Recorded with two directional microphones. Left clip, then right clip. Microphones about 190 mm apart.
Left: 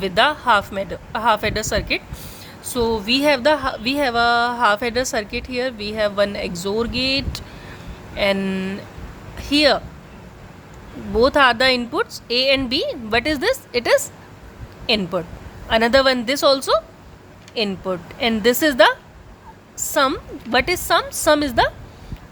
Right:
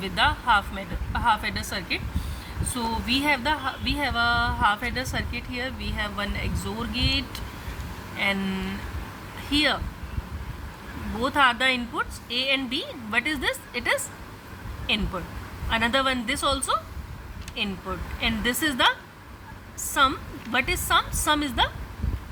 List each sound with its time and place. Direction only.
0.0 s speech: 50° left (ahead or behind)
11.2 s speech: 45° left (ahead or behind)